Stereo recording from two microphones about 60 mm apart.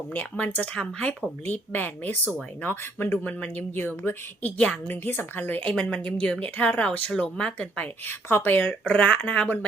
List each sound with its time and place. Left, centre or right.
0.1 s a woman's voice: left
1.5 s speech: left
4.5 s a woman's voice: centre
4.9 s a woman's voice: left
8.0 s speech: left
8.9 s a woman's voice: left